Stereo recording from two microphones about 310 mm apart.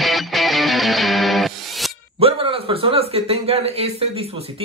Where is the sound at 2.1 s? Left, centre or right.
Centre.